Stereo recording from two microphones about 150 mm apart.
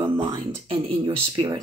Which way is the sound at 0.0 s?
30° right (ahead or behind).